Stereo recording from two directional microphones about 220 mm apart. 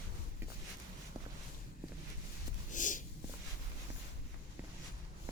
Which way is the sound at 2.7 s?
35° left (ahead or behind).